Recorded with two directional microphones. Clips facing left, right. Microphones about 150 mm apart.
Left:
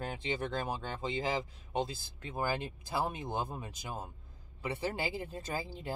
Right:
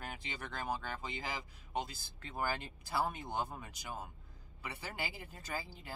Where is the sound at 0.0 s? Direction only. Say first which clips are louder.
Left 9 dB; 25° left (ahead or behind).